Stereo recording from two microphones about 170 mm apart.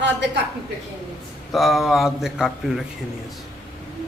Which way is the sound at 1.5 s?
Centre (ahead or behind).